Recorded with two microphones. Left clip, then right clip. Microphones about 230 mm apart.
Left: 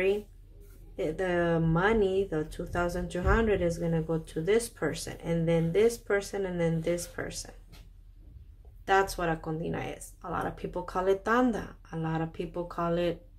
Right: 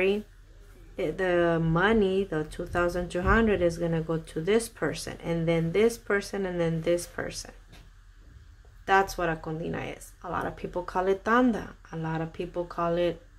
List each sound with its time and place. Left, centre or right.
0.9 s speech: centre
8.8 s speech: centre